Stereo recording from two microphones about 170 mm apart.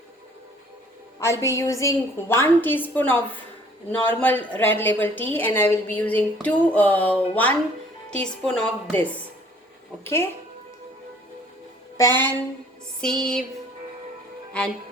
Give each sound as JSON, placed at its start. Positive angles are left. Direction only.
{"t": 1.2, "sound": "a woman's voice", "side_deg": 15}
{"t": 11.9, "sound": "music", "side_deg": 15}
{"t": 13.0, "sound": "music", "side_deg": 5}
{"t": 14.5, "sound": "a woman's voice", "side_deg": 5}